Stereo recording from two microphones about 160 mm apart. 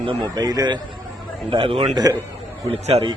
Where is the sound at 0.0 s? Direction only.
30° right (ahead or behind).